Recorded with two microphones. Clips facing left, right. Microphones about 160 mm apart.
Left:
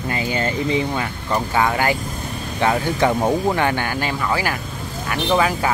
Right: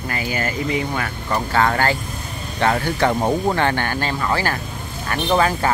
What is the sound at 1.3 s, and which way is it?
Speech, 10° left (ahead or behind).